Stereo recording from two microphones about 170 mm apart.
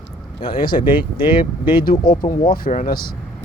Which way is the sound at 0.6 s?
55° left (ahead or behind).